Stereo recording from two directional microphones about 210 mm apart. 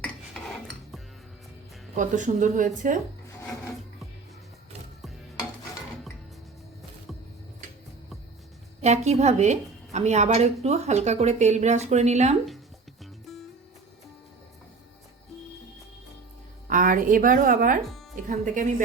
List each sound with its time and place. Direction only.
0.0 s cutlery: centre (ahead or behind)
2.0 s a woman's voice: 35° right (ahead or behind)
8.8 s a woman's voice: 30° right (ahead or behind)
16.6 s a woman's voice: 40° right (ahead or behind)